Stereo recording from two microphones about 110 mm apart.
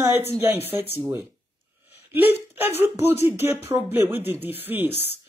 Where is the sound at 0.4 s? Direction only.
20° right (ahead or behind).